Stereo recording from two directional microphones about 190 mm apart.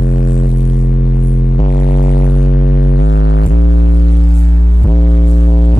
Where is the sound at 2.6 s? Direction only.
70° left (ahead or behind).